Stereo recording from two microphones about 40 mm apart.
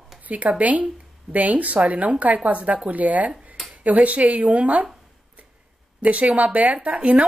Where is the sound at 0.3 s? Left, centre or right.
Right.